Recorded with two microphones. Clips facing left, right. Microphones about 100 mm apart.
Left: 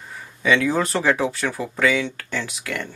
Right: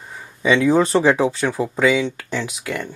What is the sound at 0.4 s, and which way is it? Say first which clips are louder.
Speech: right 4 dB; 20° right (ahead or behind).